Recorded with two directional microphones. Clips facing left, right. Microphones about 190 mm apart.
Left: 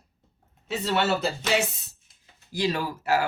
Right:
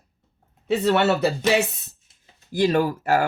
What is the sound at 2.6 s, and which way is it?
Speech, 50° right (ahead or behind).